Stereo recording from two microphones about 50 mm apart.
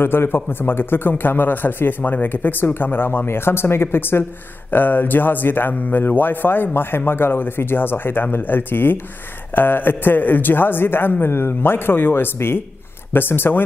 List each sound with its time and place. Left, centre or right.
0.0 s speech: left
4.6 s speech: left